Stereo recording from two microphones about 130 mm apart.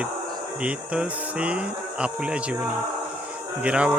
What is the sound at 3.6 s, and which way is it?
Speech, 10° right (ahead or behind).